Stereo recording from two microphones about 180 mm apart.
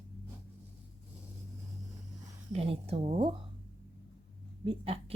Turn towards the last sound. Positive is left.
turn(degrees=-30)  # may be behind; listen again after turning